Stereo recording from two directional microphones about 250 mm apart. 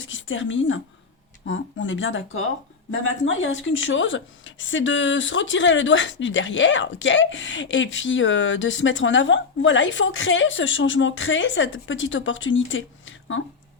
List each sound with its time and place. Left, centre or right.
0.0 s speech: left